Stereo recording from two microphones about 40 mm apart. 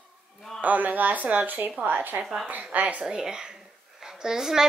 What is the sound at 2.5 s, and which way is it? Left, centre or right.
Speech, right.